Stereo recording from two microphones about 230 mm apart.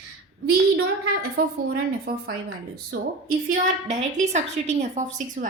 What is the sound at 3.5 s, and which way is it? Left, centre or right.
A woman's voice, right.